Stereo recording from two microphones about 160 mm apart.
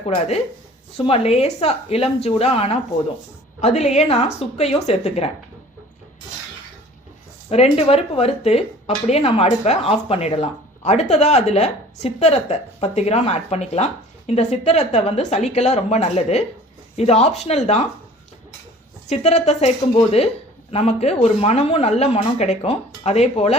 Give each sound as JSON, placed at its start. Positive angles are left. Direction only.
{"t": 0.9, "sound": "speech", "side_deg": 35}
{"t": 7.5, "sound": "speech", "side_deg": 40}
{"t": 19.0, "sound": "speech", "side_deg": 45}